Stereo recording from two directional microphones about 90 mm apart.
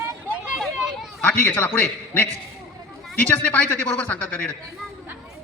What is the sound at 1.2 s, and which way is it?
A man's voice, 15° left (ahead or behind).